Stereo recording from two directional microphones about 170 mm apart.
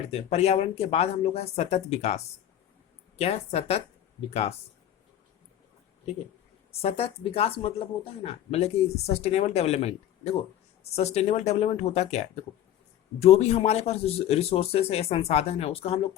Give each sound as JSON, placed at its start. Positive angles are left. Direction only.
{"t": 0.1, "sound": "speech", "side_deg": 35}
{"t": 6.7, "sound": "speech", "side_deg": 35}